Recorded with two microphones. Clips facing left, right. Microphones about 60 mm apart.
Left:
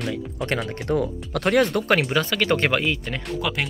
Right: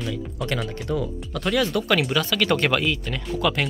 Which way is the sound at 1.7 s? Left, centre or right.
Left.